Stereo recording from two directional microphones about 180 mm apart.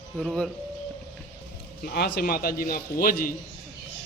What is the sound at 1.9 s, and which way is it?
A man's voice, 65° left (ahead or behind).